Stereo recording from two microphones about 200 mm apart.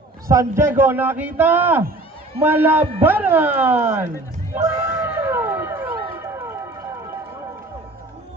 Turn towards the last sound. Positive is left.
turn(degrees=-15)  # may be behind; listen again after turning